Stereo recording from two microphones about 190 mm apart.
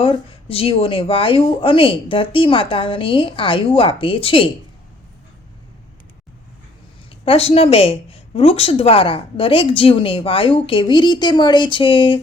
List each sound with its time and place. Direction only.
0.0 s speech: 30° left (ahead or behind)
7.3 s speech: 30° left (ahead or behind)